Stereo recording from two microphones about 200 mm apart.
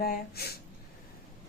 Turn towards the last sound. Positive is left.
turn(degrees=50)  # may be behind; listen again after turning